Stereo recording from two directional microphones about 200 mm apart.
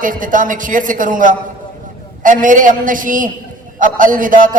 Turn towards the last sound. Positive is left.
turn(degrees=-40)  # may be behind; listen again after turning